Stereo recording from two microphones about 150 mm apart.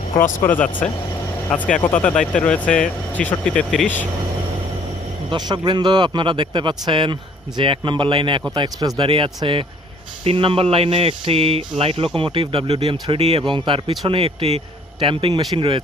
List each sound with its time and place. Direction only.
0.4 s speech: 10° left (ahead or behind)
5.3 s a man's voice: 30° right (ahead or behind)